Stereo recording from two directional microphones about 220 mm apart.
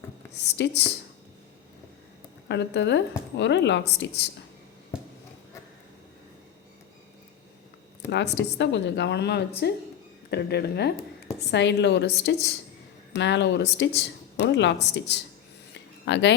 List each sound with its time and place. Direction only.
0.4 s speech: 50° left (ahead or behind)
2.5 s speech: 50° left (ahead or behind)
8.1 s speech: 50° left (ahead or behind)
15.7 s a sound: 50° left (ahead or behind)